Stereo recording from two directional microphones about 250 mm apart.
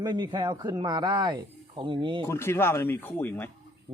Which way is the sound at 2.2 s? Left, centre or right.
Centre.